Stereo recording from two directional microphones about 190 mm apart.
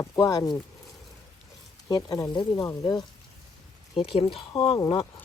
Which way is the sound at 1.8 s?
15° left (ahead or behind).